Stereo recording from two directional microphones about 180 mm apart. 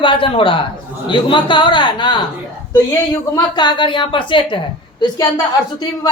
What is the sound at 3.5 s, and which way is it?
A woman's voice, 25° left (ahead or behind).